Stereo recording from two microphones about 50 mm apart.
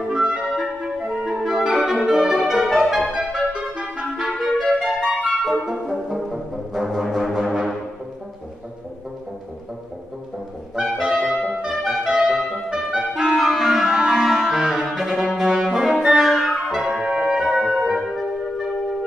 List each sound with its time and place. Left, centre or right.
0.1 s clarinet: centre
0.6 s music: centre
1.5 s clarinet: centre
1.9 s music: centre
4.6 s music: centre
5.4 s brass instrument: centre
10.8 s brass instrument: centre
11.8 s music: centre
13.4 s music: centre
15.0 s brass instrument: centre
17.0 s music: centre